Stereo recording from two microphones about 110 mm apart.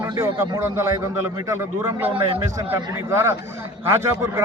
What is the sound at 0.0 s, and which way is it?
A man's voice, 25° right (ahead or behind).